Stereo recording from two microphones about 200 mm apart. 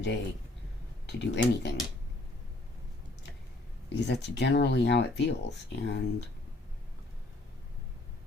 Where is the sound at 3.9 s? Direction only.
60° left (ahead or behind).